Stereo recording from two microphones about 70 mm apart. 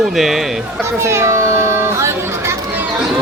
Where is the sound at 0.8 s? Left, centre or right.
Right.